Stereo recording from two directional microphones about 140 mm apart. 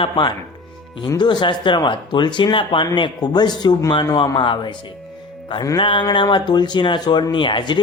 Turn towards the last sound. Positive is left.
turn(degrees=35)  # may be behind; listen again after turning